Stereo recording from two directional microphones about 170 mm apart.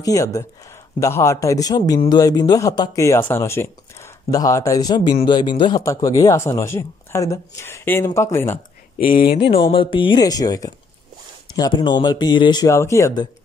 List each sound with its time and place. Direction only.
0.0 s speech: 20° left (ahead or behind)
9.7 s speech: 30° left (ahead or behind)